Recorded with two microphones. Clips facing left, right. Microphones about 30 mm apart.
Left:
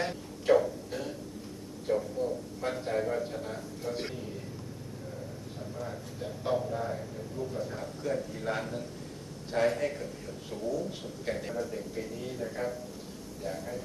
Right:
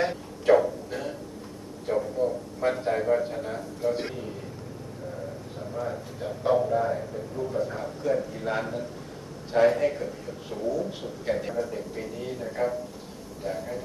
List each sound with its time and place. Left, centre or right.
0.0 s a sound: centre
3.2 s a man's voice: centre
5.8 s a man's voice: centre
7.6 s a man's voice: centre